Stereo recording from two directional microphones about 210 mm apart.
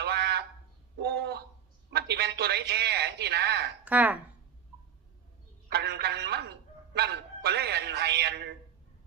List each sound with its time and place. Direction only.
0.0 s a sound: 50° right (ahead or behind)
1.9 s a man's voice: 50° right (ahead or behind)
3.8 s speech: 5° right (ahead or behind)
5.6 s telephone: 50° right (ahead or behind)